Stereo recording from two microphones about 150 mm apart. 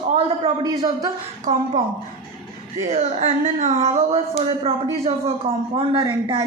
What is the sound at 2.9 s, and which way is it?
Speech, 50° right (ahead or behind).